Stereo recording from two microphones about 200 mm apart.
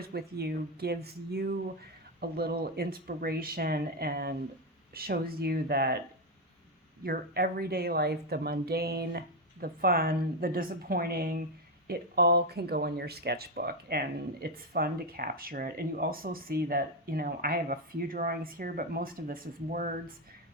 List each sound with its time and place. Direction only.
0.1 s speech: 55° right (ahead or behind)
7.0 s speech: 50° right (ahead or behind)